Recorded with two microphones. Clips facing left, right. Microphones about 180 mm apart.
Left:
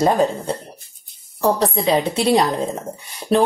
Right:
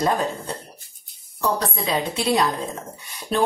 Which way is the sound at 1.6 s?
25° left (ahead or behind).